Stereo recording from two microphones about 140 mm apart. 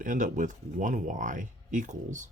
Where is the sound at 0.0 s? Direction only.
70° right (ahead or behind).